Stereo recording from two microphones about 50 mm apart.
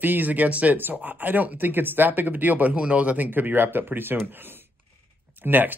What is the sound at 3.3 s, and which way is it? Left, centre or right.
Speech, right.